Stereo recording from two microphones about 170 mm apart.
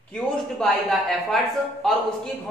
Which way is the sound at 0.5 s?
Centre (ahead or behind).